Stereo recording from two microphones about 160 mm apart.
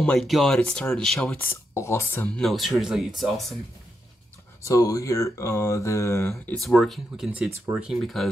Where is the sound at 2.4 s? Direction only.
Centre (ahead or behind).